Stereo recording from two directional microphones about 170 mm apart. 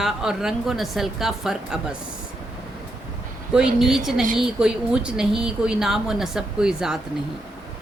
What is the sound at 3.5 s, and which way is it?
A woman's voice, 5° right (ahead or behind).